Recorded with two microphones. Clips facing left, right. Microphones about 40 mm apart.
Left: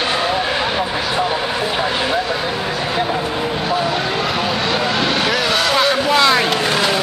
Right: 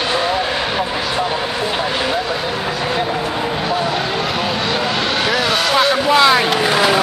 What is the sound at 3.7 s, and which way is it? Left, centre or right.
Vehicle, centre.